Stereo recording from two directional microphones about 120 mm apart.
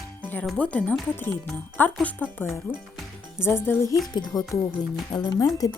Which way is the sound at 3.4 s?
20° left (ahead or behind).